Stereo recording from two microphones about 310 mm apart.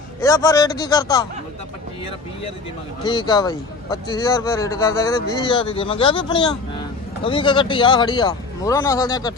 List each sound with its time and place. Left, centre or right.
0.2 s speech: centre
3.0 s speech: centre